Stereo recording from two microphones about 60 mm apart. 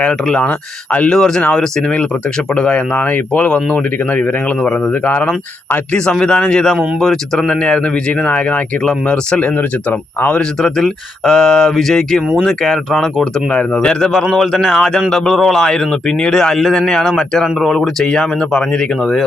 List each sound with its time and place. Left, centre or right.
0.4 s speech: left
1.0 s speech: centre
2.6 s speech: left
5.9 s speech: centre
7.4 s speech: centre
10.3 s speech: centre
13.5 s speech: centre
14.1 s speech: centre